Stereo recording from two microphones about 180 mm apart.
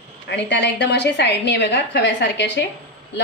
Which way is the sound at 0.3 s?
75° left (ahead or behind).